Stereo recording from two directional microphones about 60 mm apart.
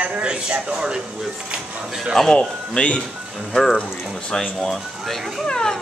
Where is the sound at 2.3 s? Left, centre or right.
Centre.